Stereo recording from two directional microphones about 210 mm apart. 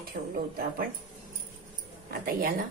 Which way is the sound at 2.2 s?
45° right (ahead or behind).